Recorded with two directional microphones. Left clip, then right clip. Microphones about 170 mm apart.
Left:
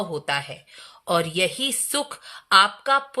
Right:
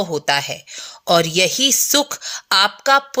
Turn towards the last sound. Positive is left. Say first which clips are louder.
# right 6 dB
turn(degrees=-30)  # may be behind; listen again after turning